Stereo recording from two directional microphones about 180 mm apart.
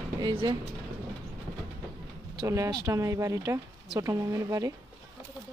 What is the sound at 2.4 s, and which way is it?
A woman's voice, 15° right (ahead or behind).